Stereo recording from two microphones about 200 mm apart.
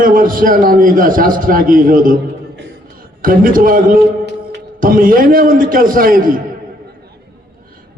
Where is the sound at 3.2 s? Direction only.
45° right (ahead or behind).